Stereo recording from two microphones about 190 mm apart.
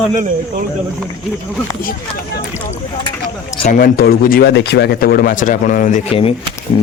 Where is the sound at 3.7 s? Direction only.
50° left (ahead or behind); by 6.3 s 30° left (ahead or behind).